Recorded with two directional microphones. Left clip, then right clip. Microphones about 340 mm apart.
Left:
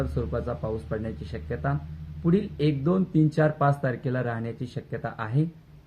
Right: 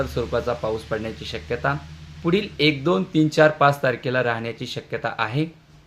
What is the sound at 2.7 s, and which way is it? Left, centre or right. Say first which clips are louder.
Speech: right 6 dB; centre.